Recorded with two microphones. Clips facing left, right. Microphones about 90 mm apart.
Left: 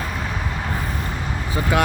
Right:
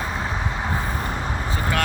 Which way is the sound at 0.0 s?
20° right (ahead or behind).